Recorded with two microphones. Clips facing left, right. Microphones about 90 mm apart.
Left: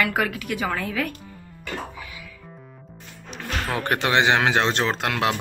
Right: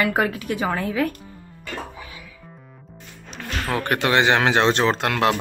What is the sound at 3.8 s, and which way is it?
Speech, 20° left (ahead or behind).